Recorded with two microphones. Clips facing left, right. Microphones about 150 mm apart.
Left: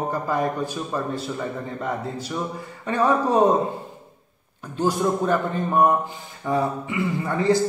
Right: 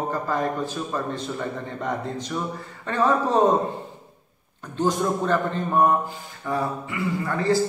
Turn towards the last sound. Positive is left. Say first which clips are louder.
# left 2 dB
turn(degrees=20)  # may be behind; listen again after turning